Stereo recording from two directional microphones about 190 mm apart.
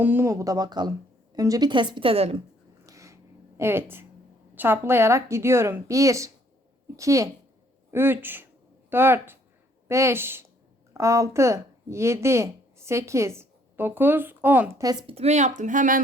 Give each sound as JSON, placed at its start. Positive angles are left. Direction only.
{"t": 0.0, "sound": "a woman's voice", "side_deg": -10}
{"t": 2.8, "sound": "a sound", "side_deg": -15}
{"t": 3.6, "sound": "speech", "side_deg": -10}